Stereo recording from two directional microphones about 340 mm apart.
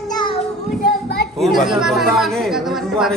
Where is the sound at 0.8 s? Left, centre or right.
Left.